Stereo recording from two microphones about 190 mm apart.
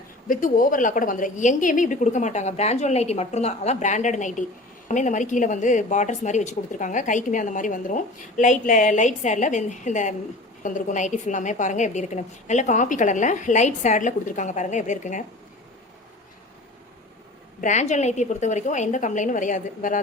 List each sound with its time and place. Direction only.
0.3 s a woman's voice: 45° left (ahead or behind)
17.6 s a woman's voice: 40° left (ahead or behind)